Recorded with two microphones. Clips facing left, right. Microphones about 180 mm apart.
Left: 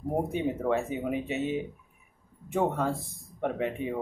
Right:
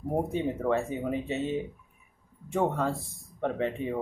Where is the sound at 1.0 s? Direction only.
15° left (ahead or behind).